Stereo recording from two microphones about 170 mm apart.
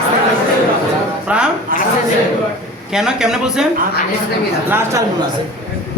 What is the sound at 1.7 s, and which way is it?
Speech, 55° right (ahead or behind).